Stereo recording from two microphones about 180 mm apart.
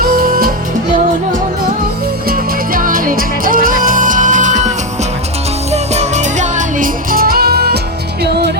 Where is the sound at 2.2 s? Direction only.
50° right (ahead or behind).